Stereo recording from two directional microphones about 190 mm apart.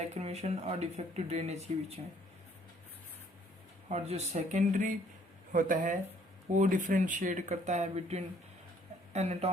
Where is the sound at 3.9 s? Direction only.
35° right (ahead or behind).